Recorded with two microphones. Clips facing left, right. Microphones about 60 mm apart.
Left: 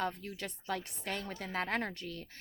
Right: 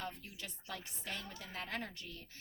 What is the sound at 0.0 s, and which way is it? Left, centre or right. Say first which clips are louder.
A woman's voice: left 9 dB; left.